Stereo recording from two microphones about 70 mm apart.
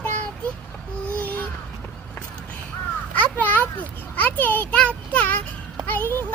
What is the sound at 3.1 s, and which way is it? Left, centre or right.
Children playing, left.